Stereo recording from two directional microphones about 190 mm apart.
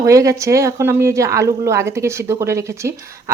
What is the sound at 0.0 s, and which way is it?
Speech, 15° right (ahead or behind).